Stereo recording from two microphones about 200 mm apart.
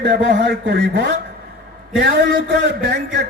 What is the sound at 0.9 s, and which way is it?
A man's voice, 55° right (ahead or behind).